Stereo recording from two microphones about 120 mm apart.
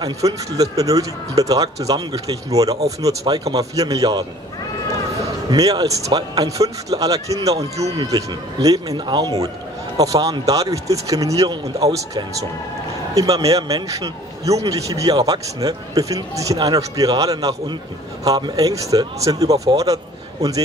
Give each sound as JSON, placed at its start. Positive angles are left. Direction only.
{"t": 0.0, "sound": "a man's voice", "side_deg": -30}
{"t": 5.5, "sound": "a man's voice", "side_deg": -30}